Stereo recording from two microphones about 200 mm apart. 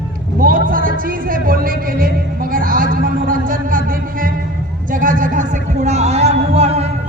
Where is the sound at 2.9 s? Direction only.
45° right (ahead or behind).